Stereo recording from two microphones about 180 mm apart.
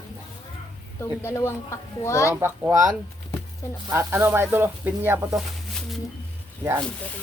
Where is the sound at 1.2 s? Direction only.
15° left (ahead or behind).